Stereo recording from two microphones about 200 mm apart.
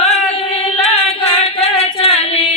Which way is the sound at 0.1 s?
30° left (ahead or behind).